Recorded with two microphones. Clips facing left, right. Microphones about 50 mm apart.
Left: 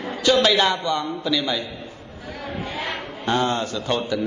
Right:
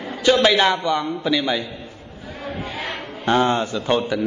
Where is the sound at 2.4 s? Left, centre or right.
Right.